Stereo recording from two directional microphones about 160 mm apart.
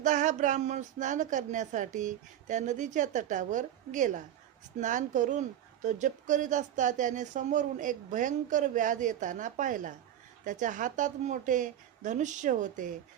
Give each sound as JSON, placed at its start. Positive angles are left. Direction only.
{"t": 0.0, "sound": "speech", "side_deg": -50}